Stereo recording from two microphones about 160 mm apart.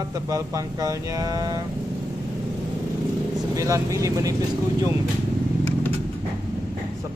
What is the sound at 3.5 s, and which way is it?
Speech, 20° right (ahead or behind).